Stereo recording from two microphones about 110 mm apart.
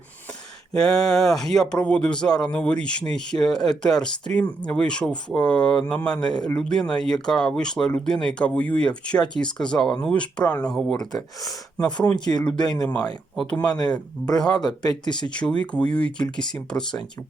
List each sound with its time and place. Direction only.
0.7 s speech: 5° left (ahead or behind)
11.1 s speech: 35° left (ahead or behind)
13.3 s speech: centre (ahead or behind)
13.6 s speech: 40° left (ahead or behind)
15.3 s speech: 10° left (ahead or behind)